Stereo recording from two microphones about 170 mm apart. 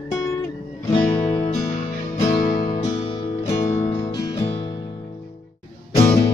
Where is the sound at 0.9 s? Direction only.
40° left (ahead or behind).